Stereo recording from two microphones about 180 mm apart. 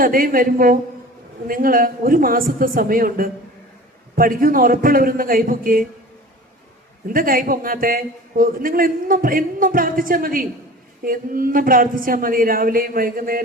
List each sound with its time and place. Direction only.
0.0 s a man's voice: 50° right (ahead or behind)
7.1 s a man's voice: 50° right (ahead or behind)